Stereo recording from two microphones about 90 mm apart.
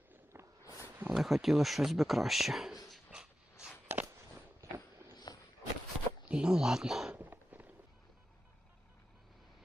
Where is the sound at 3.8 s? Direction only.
25° right (ahead or behind).